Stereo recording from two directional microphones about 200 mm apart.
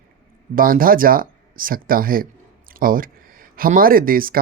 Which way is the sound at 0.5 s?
45° right (ahead or behind).